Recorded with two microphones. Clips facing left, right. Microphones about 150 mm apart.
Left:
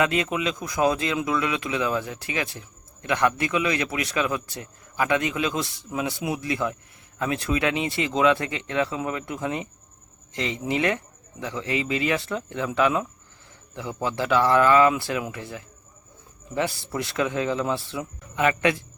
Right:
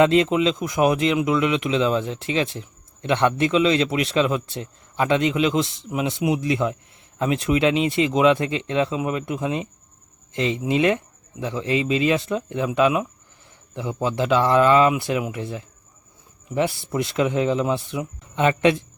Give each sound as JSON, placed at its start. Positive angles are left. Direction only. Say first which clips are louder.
{"t": 0.0, "sound": "speech", "louder": "right 7 dB", "side_deg": -25}